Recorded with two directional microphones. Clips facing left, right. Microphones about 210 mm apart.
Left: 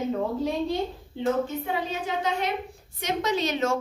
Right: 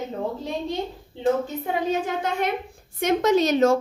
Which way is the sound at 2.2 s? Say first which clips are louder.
Right 2 dB; 50° right (ahead or behind).